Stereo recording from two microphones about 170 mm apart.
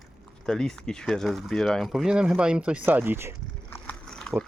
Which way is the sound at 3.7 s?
5° left (ahead or behind).